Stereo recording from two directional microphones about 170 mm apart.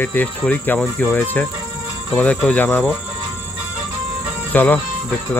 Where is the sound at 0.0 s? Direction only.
10° left (ahead or behind).